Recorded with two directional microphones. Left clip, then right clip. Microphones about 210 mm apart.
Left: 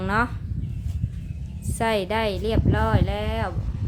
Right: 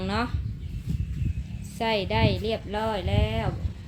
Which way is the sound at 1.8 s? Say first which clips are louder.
Left 2 dB; 10° left (ahead or behind).